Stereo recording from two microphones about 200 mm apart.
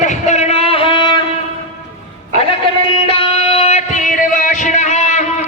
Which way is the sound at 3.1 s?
30° left (ahead or behind).